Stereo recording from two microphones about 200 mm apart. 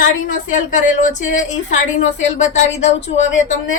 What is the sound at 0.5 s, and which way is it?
Speech, 40° left (ahead or behind).